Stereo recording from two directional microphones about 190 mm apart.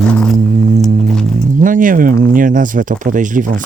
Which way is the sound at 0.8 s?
Centre (ahead or behind).